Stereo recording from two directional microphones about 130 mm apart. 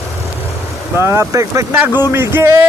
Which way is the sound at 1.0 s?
20° right (ahead or behind).